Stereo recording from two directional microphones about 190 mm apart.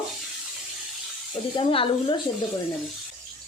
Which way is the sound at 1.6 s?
30° left (ahead or behind).